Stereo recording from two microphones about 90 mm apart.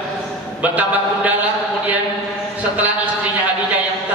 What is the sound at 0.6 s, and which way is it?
Speech, 15° right (ahead or behind).